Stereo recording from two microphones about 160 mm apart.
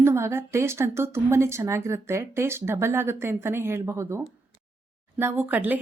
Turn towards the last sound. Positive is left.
turn(degrees=-10)  # may be behind; listen again after turning